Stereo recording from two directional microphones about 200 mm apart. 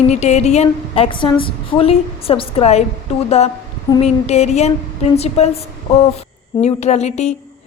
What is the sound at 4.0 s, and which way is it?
Speech, 35° left (ahead or behind).